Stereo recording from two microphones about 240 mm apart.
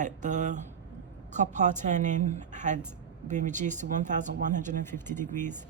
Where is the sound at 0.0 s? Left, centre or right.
Right.